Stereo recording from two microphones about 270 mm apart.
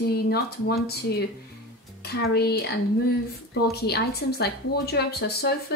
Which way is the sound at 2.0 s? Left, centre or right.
Left.